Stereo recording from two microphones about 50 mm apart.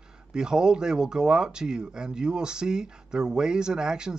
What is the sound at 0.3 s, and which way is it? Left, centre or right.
Speech, centre.